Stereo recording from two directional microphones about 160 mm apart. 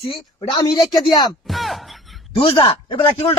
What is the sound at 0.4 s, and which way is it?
Speech, 25° left (ahead or behind).